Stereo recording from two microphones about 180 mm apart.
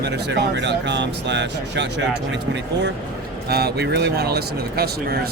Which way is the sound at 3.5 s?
60° right (ahead or behind).